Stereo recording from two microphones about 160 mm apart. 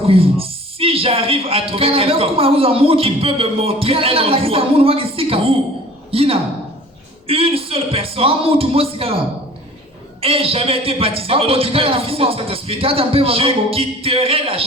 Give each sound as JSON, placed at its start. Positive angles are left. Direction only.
{"t": 0.0, "sound": "a man's voice", "side_deg": -35}
{"t": 6.1, "sound": "a sound", "side_deg": -35}
{"t": 10.2, "sound": "a man's voice", "side_deg": -35}